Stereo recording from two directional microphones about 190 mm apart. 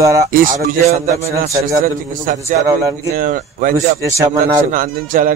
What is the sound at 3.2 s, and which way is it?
Speech, 50° right (ahead or behind).